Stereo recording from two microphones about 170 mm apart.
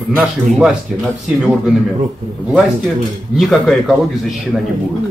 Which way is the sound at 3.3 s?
Centre (ahead or behind).